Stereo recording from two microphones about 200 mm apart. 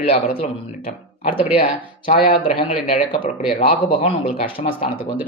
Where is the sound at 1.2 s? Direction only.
30° left (ahead or behind).